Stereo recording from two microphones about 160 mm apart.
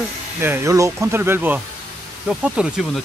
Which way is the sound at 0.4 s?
15° right (ahead or behind).